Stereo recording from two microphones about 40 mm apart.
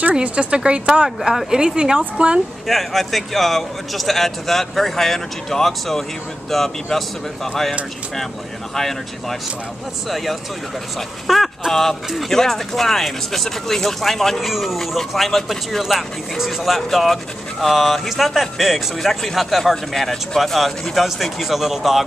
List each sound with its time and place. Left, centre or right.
0.2 s speech: right
1.0 s speech: centre
2.6 s speech: centre
8.7 s speech: centre